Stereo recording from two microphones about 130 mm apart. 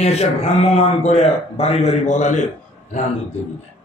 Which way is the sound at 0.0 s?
55° left (ahead or behind).